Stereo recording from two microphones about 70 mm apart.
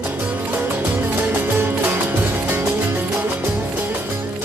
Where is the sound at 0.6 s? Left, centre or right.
Right.